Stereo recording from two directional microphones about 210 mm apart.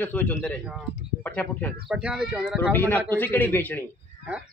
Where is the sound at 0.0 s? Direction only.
10° left (ahead or behind).